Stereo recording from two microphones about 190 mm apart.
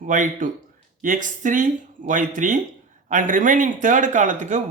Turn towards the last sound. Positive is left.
turn(degrees=-40)  # may be behind; listen again after turning